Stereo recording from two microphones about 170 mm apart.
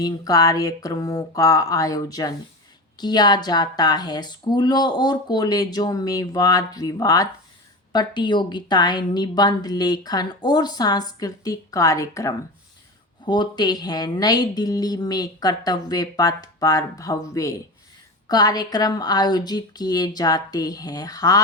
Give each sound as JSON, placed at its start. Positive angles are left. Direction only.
{"t": 0.0, "sound": "a woman's voice", "side_deg": 20}